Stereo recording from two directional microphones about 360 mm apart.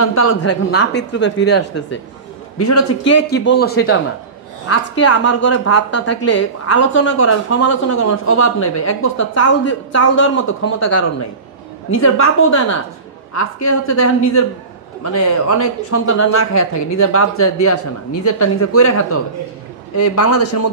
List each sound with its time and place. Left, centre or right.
0.0 s speech: left
2.6 s a woman's voice: left
3.3 s a woman's voice: left
13.3 s a woman's voice: left
20.0 s a woman's voice: left